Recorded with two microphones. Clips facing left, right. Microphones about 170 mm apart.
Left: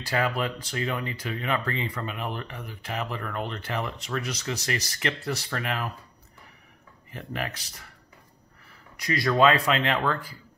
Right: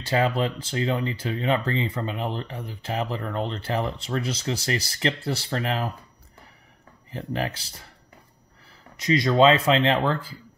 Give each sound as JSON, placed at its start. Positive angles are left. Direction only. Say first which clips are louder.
{"t": 0.0, "sound": "speech", "louder": "right 4 dB", "side_deg": -25}
{"t": 7.1, "sound": "speech", "louder": "right 5 dB", "side_deg": -30}
{"t": 8.9, "sound": "speech", "louder": "right 4 dB", "side_deg": -20}